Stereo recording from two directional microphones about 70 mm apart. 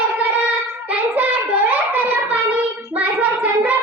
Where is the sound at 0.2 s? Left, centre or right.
Right.